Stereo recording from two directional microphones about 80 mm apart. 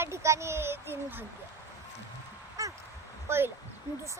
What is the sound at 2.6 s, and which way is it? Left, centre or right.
Crow, right.